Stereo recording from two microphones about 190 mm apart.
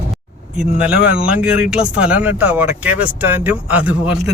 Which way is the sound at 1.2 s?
5° right (ahead or behind).